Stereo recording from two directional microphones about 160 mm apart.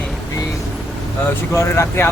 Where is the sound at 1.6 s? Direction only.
15° left (ahead or behind).